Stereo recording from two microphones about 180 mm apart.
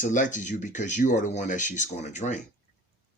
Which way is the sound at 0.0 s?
45° left (ahead or behind).